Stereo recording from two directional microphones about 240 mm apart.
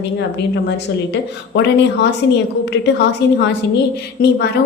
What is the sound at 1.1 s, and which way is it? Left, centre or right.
A woman's voice, left.